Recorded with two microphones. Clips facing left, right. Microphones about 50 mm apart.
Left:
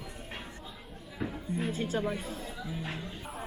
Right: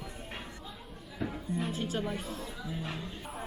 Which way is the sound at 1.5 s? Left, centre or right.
Left.